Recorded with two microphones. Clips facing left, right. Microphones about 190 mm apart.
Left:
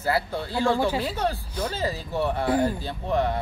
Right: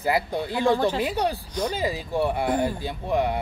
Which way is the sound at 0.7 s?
10° left (ahead or behind).